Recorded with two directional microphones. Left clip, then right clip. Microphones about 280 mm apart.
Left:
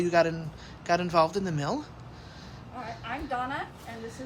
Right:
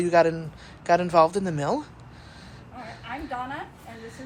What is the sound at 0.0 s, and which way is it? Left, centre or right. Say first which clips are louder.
A woman's voice: right 4 dB; centre.